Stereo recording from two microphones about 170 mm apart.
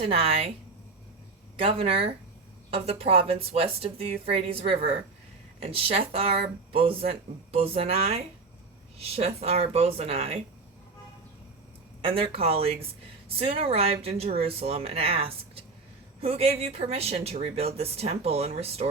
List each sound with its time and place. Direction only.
0.0 s speech: 35° right (ahead or behind)
1.5 s speech: 35° right (ahead or behind)
12.0 s speech: 35° right (ahead or behind)